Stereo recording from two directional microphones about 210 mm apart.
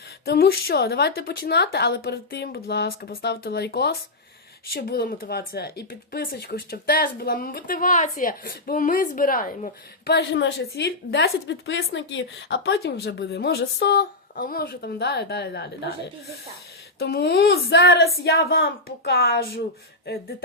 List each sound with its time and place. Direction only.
0.3 s a woman's voice: 45° left (ahead or behind)
10.2 s a woman's voice: 55° left (ahead or behind)
17.0 s a woman's voice: 50° left (ahead or behind)